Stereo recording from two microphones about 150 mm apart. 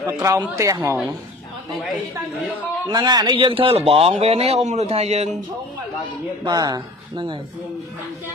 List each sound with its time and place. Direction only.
0.0 s speech: 20° right (ahead or behind)
2.9 s a man's voice: 25° right (ahead or behind); by 5.3 s 45° right (ahead or behind)
6.4 s speech: 25° right (ahead or behind)